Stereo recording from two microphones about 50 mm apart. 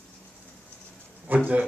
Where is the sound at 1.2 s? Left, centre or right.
Right.